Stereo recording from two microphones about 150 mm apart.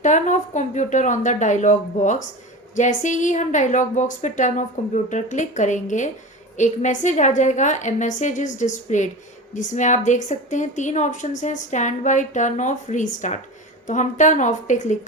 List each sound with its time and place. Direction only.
0.0 s a woman's voice: 55° left (ahead or behind)